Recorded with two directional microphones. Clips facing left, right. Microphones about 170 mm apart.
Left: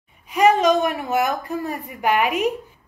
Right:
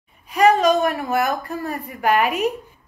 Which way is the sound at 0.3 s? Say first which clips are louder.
Right 1 dB; 15° left (ahead or behind).